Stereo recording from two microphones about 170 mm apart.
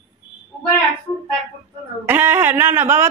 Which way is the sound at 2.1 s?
10° right (ahead or behind).